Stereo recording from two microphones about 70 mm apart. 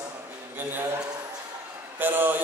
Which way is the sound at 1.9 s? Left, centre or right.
Right.